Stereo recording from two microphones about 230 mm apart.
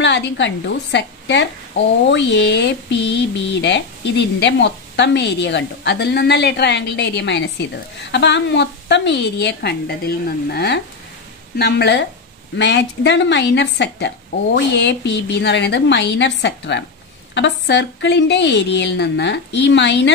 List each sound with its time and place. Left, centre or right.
0.0 s speech: left